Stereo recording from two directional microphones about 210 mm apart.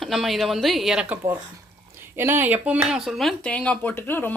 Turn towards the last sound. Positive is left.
turn(degrees=10)  # may be behind; listen again after turning